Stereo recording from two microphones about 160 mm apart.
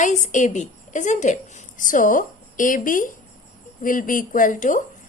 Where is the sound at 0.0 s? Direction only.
50° left (ahead or behind).